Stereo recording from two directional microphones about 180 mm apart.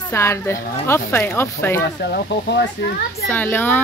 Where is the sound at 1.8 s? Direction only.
65° left (ahead or behind).